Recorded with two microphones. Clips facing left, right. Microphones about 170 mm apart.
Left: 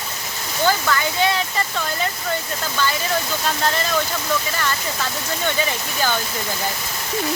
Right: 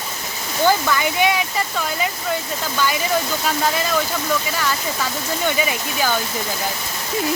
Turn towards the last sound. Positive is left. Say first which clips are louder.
# right 1 dB
turn(degrees=-10)  # may be behind; listen again after turning